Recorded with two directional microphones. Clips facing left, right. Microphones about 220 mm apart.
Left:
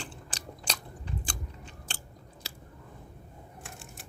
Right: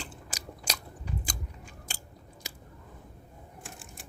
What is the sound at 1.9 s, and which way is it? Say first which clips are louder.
Biting: left 1 dB; 10° right (ahead or behind).